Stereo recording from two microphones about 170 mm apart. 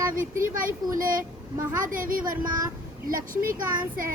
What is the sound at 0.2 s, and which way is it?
Speech, 55° right (ahead or behind).